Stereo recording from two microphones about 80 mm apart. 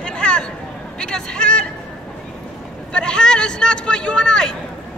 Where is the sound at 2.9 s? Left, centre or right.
Centre.